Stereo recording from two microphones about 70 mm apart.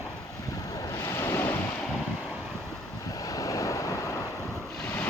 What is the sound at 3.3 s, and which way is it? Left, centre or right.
Vehicle, left.